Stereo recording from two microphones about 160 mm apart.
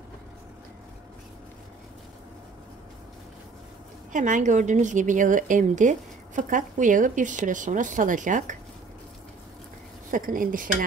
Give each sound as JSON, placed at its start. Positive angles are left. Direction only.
{"t": 4.1, "sound": "a woman's voice", "side_deg": -50}
{"t": 10.1, "sound": "speech", "side_deg": -60}